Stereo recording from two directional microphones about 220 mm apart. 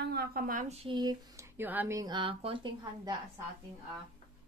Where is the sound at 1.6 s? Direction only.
10° right (ahead or behind).